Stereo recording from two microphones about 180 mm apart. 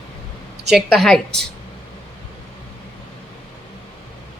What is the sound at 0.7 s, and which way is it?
Speech, centre (ahead or behind).